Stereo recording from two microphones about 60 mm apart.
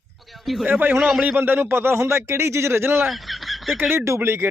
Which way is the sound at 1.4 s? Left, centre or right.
Right.